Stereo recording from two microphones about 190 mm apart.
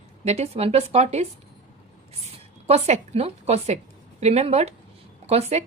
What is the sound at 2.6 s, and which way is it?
A woman's voice, 35° right (ahead or behind).